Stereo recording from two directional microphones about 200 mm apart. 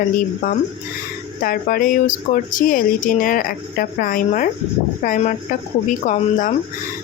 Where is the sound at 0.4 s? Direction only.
45° left (ahead or behind).